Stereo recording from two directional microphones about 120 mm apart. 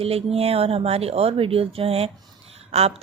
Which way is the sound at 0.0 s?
55° right (ahead or behind).